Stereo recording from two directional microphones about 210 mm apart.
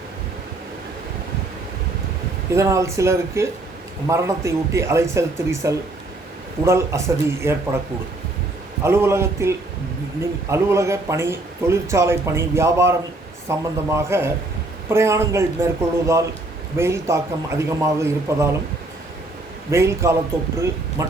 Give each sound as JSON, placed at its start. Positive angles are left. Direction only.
{"t": 2.5, "sound": "speech", "side_deg": -15}
{"t": 8.8, "sound": "speech", "side_deg": -10}
{"t": 19.7, "sound": "speech", "side_deg": -15}